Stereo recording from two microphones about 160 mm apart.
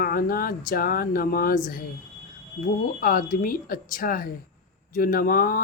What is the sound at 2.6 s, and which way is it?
Speech, 60° left (ahead or behind).